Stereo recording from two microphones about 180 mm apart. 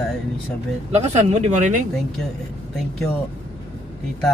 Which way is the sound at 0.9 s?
35° right (ahead or behind).